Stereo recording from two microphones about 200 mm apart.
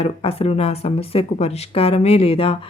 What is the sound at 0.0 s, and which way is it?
Speech, 30° left (ahead or behind).